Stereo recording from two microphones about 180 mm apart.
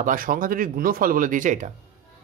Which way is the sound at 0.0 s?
50° right (ahead or behind).